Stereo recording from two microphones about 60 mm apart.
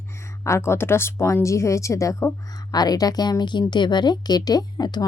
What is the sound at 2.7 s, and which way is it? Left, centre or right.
Speech, left.